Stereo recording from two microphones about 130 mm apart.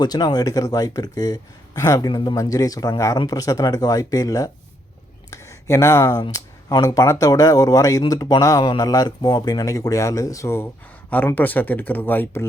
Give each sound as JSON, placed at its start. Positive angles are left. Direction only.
{"t": 0.0, "sound": "speech", "side_deg": 30}